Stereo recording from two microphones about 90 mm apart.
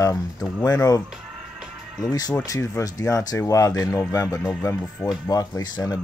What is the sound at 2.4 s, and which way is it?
Speech, 35° left (ahead or behind).